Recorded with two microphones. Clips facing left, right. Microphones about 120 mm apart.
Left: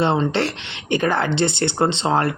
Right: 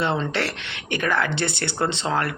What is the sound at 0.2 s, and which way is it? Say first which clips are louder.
Speech: left 5 dB; 25° left (ahead or behind).